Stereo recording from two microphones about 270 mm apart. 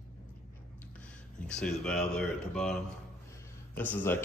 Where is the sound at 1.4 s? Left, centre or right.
Centre.